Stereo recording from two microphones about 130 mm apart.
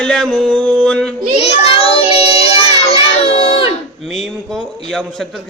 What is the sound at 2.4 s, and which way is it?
Music, 50° left (ahead or behind).